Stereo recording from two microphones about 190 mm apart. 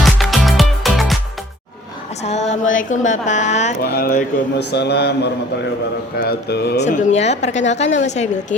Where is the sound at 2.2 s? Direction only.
35° left (ahead or behind).